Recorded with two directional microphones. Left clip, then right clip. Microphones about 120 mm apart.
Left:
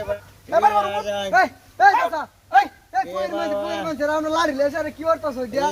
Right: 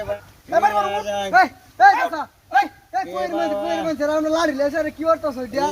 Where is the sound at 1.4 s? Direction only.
25° left (ahead or behind).